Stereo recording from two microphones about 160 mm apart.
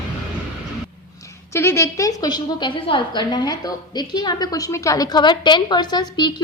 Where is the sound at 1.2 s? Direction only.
15° left (ahead or behind).